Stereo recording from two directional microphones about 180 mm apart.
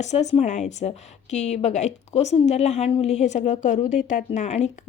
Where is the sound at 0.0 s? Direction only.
40° left (ahead or behind).